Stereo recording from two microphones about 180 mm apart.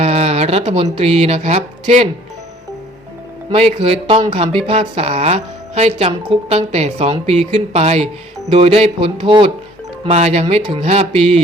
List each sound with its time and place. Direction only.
0.0 s speech: 35° right (ahead or behind)
3.5 s a woman's voice: 35° right (ahead or behind)